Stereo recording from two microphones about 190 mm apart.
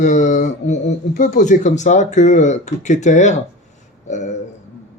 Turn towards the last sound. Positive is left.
turn(degrees=40)  # may be behind; listen again after turning